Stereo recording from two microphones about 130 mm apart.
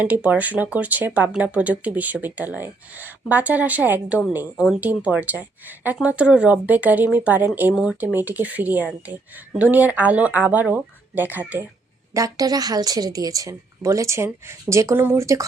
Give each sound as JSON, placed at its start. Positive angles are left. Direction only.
{"t": 0.0, "sound": "speech", "side_deg": -10}
{"t": 12.1, "sound": "speech", "side_deg": -25}